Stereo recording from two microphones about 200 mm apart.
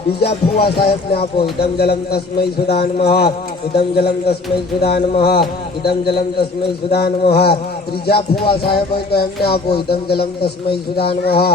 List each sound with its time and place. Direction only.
0.2 s music: 55° left (ahead or behind)
6.9 s music: 55° left (ahead or behind)